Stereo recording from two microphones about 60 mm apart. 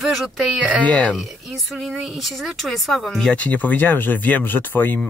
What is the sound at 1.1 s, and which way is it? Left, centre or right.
Speech, centre.